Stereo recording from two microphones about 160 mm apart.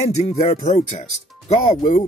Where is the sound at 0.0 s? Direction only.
45° left (ahead or behind).